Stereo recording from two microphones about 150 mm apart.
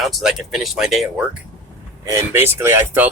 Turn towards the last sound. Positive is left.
turn(degrees=-15)  # may be behind; listen again after turning